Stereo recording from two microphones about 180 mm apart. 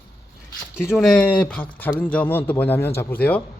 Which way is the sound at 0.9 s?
5° left (ahead or behind).